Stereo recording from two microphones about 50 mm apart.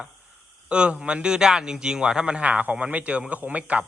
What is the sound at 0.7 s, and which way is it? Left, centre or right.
A man's voice, centre.